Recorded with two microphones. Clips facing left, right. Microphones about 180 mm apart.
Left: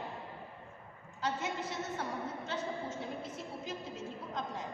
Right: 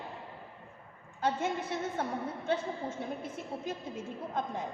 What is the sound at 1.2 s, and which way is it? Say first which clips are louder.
A woman's voice: right 5 dB; 55° right (ahead or behind).